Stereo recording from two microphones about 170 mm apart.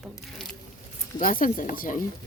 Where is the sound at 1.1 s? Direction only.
55° left (ahead or behind).